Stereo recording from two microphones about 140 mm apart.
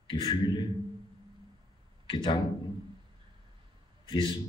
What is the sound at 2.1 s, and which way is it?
Speech, 35° left (ahead or behind).